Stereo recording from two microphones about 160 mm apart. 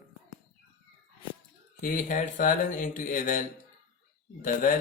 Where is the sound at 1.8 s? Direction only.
55° left (ahead or behind).